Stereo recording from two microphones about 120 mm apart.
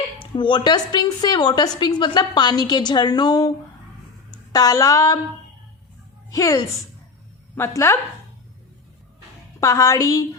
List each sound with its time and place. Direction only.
0.3 s a woman's voice: 40° left (ahead or behind)
6.3 s a woman's voice: 30° left (ahead or behind)
9.6 s a woman's voice: 25° left (ahead or behind)